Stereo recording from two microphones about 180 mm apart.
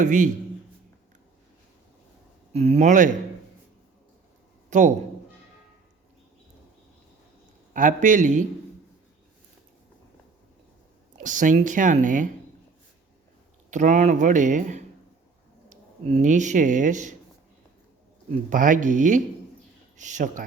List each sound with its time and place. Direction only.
0.0 s speech: 45° right (ahead or behind)
2.5 s speech: 35° right (ahead or behind)
4.7 s speech: 45° right (ahead or behind)
7.7 s speech: 45° right (ahead or behind)
11.2 s speech: 45° right (ahead or behind)
13.7 s speech: 45° right (ahead or behind)
18.3 s speech: 45° right (ahead or behind)